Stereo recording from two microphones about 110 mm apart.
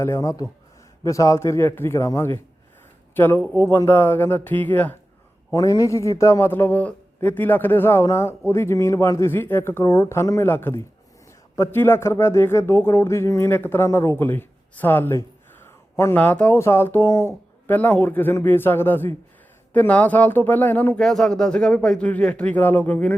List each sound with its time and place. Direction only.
0.0 s a man's voice: 25° left (ahead or behind)
5.5 s a man's voice: 30° left (ahead or behind)
15.6 s a sound: 25° left (ahead or behind)
16.1 s a man's voice: 15° left (ahead or behind)
21.0 s speech: 5° left (ahead or behind)